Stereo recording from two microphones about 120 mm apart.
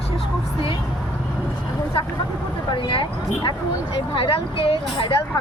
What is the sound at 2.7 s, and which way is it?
Speech, 45° left (ahead or behind).